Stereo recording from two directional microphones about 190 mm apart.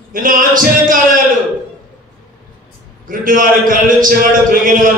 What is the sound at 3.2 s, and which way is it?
A man's voice, 45° right (ahead or behind).